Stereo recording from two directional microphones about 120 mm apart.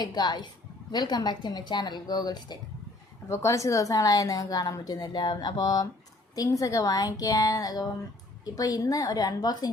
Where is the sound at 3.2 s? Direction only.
25° left (ahead or behind).